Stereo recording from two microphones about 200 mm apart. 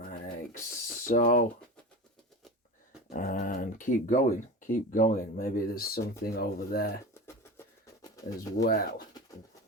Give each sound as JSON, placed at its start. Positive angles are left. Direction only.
{"t": 1.0, "sound": "speech", "side_deg": 40}
{"t": 3.1, "sound": "speech", "side_deg": 45}
{"t": 7.1, "sound": "a sound", "side_deg": 10}
{"t": 8.6, "sound": "speech", "side_deg": 45}